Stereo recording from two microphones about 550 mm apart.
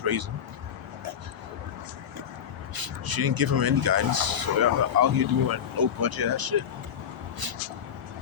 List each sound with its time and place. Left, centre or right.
0.0 s speech: right
2.7 s speech: right